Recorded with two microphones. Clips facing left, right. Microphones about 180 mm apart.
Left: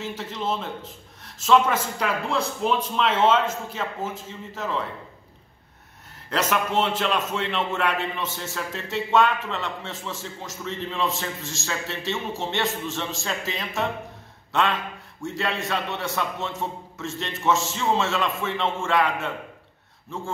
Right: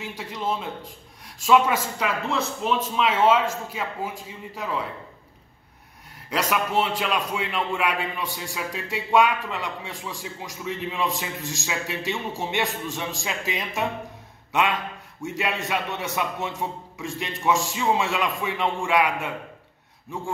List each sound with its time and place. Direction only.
0.0 s a man's voice: 10° right (ahead or behind)
6.3 s a man's voice: 5° right (ahead or behind)